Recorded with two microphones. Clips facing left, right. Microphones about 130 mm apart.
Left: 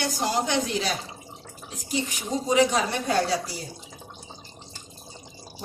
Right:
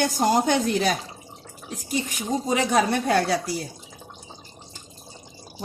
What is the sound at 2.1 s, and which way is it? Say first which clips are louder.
Speech: even; 55° right (ahead or behind).